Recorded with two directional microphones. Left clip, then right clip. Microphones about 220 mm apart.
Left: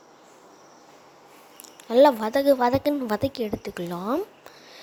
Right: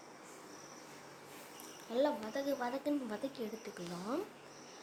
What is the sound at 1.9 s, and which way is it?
A woman's voice, 40° left (ahead or behind).